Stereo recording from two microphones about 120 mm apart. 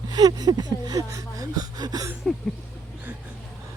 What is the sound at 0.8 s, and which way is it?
Speech, 30° right (ahead or behind).